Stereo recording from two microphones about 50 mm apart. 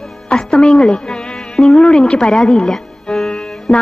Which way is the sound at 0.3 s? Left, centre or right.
Centre.